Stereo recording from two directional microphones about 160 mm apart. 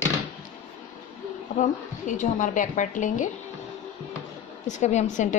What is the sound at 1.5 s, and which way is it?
A woman's voice, 50° left (ahead or behind).